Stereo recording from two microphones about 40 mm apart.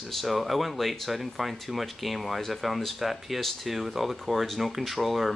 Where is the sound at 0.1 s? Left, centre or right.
Centre.